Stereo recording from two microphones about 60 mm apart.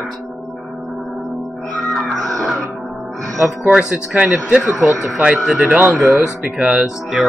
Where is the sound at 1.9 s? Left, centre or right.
Centre.